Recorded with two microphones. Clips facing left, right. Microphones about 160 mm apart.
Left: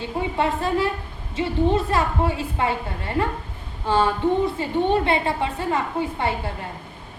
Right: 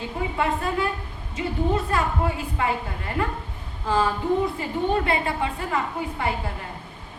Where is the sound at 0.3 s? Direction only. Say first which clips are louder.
Left 3 dB; 30° left (ahead or behind).